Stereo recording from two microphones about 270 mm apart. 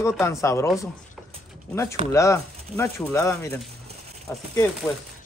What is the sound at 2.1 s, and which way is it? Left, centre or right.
Speech, centre.